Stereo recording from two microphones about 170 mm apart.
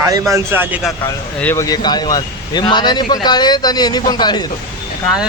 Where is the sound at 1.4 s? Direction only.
15° left (ahead or behind).